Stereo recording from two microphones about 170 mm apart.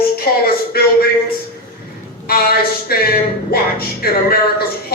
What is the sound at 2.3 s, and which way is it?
Speech, 65° left (ahead or behind).